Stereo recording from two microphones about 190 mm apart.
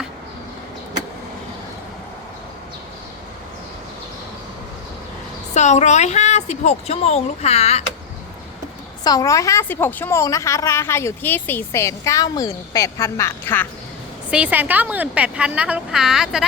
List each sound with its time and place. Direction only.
5.5 s speech: 35° left (ahead or behind)
9.0 s a woman's voice: 15° left (ahead or behind)
14.3 s a woman's voice: 5° right (ahead or behind)